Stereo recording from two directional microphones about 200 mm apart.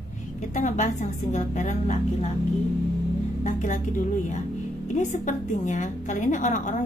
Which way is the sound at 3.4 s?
40° left (ahead or behind).